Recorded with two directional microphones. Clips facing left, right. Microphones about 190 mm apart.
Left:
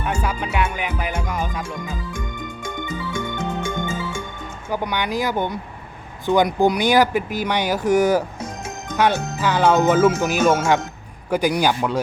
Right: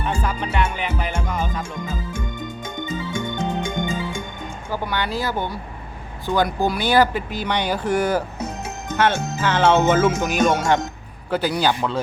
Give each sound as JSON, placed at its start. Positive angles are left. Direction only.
{"t": 0.0, "sound": "music", "side_deg": 10}
{"t": 2.6, "sound": "music", "side_deg": -20}
{"t": 4.7, "sound": "speech", "side_deg": 15}